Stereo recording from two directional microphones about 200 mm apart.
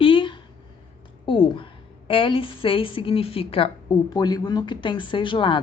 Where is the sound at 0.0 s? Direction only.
25° left (ahead or behind).